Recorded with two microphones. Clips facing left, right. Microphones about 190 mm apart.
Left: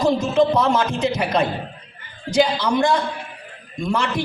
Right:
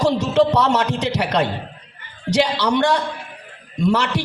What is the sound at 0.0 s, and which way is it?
A man's voice, 75° right (ahead or behind).